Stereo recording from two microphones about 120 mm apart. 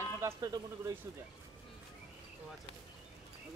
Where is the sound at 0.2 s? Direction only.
30° right (ahead or behind).